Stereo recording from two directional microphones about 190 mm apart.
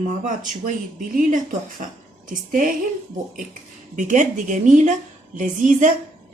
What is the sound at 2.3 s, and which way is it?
Speech, 45° right (ahead or behind).